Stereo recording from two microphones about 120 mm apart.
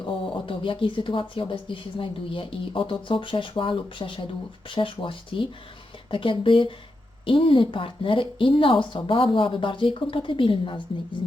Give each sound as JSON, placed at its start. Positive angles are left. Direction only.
{"t": 0.3, "sound": "a woman's voice", "side_deg": 45}